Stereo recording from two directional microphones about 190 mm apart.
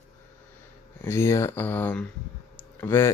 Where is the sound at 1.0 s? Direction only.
15° left (ahead or behind).